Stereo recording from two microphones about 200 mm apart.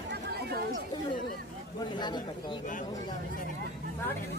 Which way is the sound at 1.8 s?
20° left (ahead or behind).